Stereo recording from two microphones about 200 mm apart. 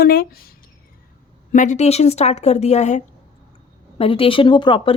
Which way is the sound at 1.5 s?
40° left (ahead or behind).